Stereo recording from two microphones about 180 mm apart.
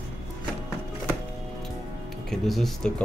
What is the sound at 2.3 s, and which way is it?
Speech, centre (ahead or behind).